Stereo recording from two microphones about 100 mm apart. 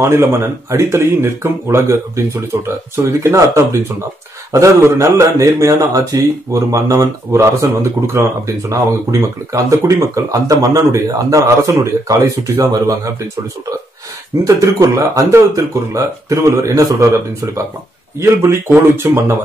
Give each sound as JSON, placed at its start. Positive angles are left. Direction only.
{"t": 0.0, "sound": "speech", "side_deg": -30}
{"t": 14.4, "sound": "speech", "side_deg": -35}
{"t": 18.2, "sound": "speech", "side_deg": -30}